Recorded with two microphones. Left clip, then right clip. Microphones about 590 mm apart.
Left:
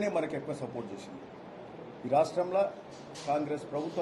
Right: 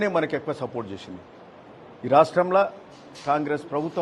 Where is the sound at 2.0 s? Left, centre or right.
Right.